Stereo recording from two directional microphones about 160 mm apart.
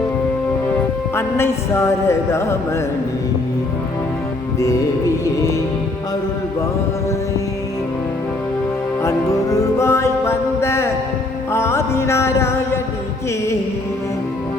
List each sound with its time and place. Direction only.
0.8 s music: 15° left (ahead or behind)
4.6 s music: 20° left (ahead or behind)
9.0 s music: 20° left (ahead or behind)